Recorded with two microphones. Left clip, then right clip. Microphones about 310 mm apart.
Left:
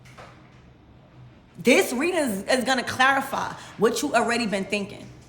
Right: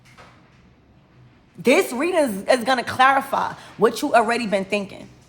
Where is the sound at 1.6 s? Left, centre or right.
Centre.